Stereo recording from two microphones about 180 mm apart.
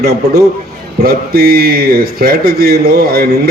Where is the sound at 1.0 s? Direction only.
55° right (ahead or behind).